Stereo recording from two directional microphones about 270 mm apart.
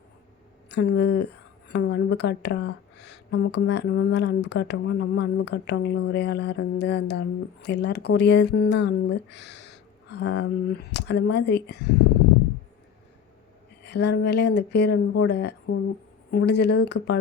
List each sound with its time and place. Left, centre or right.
0.7 s speech: left
13.8 s speech: left